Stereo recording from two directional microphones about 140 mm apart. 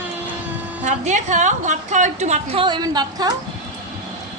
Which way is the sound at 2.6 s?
30° right (ahead or behind).